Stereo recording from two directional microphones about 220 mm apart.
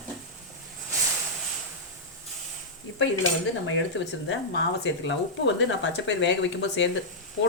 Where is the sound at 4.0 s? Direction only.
60° left (ahead or behind).